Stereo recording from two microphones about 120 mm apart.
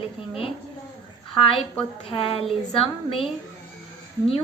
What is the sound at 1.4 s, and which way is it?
A woman's voice, 50° left (ahead or behind).